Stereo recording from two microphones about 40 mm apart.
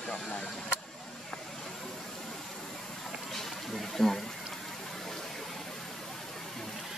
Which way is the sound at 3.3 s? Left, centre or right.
Centre.